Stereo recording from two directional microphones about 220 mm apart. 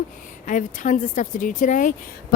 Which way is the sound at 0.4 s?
35° left (ahead or behind).